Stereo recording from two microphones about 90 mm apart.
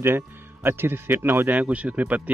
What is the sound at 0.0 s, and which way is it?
Speech, 25° right (ahead or behind).